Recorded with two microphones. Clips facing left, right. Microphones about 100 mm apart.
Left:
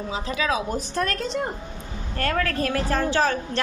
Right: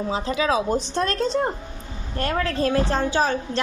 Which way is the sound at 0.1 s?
35° right (ahead or behind).